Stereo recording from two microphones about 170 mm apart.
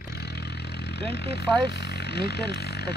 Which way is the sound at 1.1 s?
75° left (ahead or behind).